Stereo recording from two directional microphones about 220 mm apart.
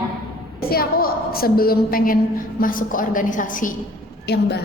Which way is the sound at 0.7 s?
45° left (ahead or behind).